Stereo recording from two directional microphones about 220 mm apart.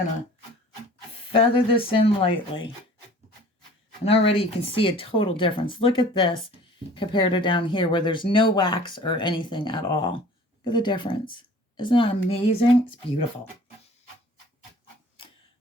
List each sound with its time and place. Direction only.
1.3 s speech: 25° left (ahead or behind)
4.0 s speech: 25° left (ahead or behind)